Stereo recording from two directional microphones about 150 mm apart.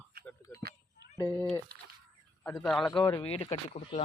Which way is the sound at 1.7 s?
90° right.